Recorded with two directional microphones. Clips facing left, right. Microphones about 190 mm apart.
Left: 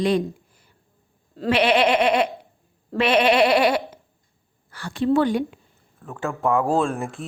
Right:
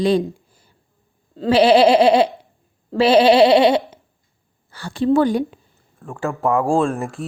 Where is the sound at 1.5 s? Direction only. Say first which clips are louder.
Right 6 dB; 30° right (ahead or behind).